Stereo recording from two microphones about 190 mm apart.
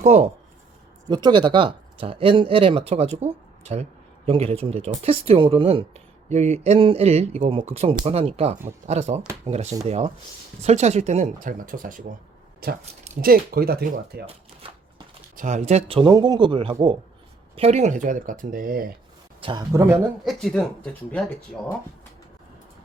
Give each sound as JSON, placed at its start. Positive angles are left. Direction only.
{"t": 0.0, "sound": "speech", "side_deg": -35}
{"t": 1.0, "sound": "speech", "side_deg": -20}
{"t": 15.4, "sound": "speech", "side_deg": -40}
{"t": 19.4, "sound": "speech", "side_deg": -25}
{"t": 20.2, "sound": "speech", "side_deg": 0}